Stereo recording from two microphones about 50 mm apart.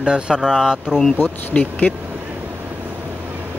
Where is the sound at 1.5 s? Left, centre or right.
Left.